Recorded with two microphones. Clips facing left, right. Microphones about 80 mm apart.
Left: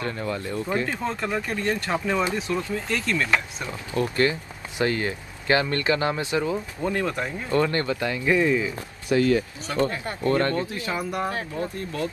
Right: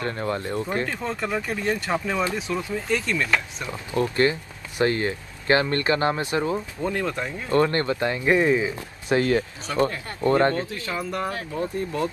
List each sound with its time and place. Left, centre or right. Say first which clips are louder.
0.1 s speech: right 2 dB; right
0.4 s speech: right 1 dB; right
0.8 s speech: even; centre
3.9 s speech: right 1 dB; right
6.8 s speech: left 3 dB; centre
7.6 s speech: right 2 dB; right
9.1 s speech: left 1 dB; right
10.2 s speech: right 3 dB; right
10.7 s speech: left 1 dB; centre
11.5 s speech: right 3 dB; right